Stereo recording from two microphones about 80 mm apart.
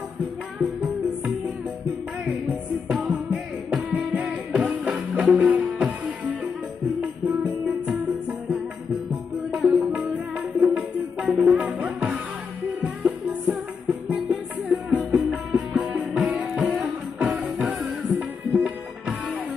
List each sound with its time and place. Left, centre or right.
0.6 s music: centre
2.9 s music: centre
11.8 s music: centre
17.3 s music: centre
17.6 s music: centre